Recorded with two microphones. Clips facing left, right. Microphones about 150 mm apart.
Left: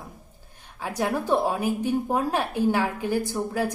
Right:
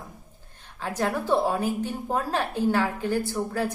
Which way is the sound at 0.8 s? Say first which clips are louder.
Left 1 dB; 10° left (ahead or behind).